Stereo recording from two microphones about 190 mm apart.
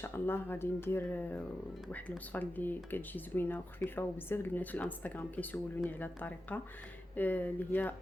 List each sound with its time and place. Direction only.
0.0 s speech: 10° left (ahead or behind)